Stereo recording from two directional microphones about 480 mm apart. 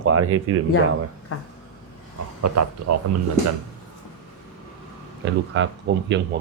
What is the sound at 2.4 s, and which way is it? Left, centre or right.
Speech, right.